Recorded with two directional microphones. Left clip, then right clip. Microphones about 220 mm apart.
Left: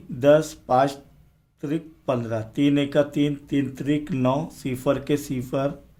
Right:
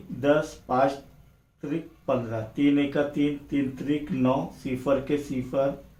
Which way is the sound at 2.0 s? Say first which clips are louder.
Left 2 dB; 40° left (ahead or behind).